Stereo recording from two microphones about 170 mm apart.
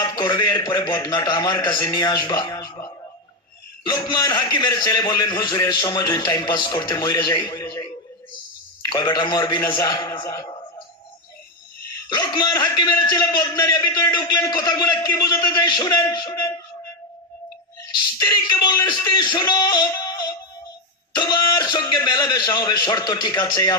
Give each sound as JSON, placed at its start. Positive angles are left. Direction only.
{"t": 0.0, "sound": "a man's voice", "side_deg": 25}
{"t": 3.8, "sound": "a man's voice", "side_deg": 25}
{"t": 8.8, "sound": "a man's voice", "side_deg": 25}
{"t": 12.1, "sound": "a man's voice", "side_deg": 25}
{"t": 18.5, "sound": "a man's voice", "side_deg": 20}